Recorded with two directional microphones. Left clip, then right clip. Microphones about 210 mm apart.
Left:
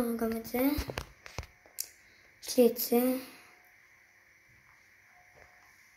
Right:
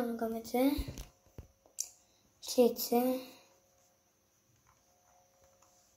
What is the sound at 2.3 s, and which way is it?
Speech, 20° left (ahead or behind).